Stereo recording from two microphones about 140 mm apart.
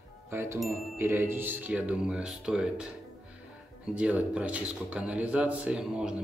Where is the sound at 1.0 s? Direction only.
15° right (ahead or behind).